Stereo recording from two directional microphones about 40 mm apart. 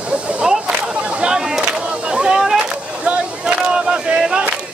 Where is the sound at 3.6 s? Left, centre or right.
Centre.